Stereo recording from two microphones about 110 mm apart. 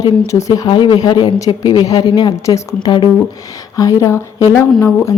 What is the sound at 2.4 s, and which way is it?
Speech, 30° left (ahead or behind).